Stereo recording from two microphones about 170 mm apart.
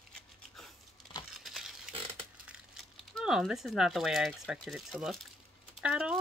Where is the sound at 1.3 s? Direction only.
Centre (ahead or behind).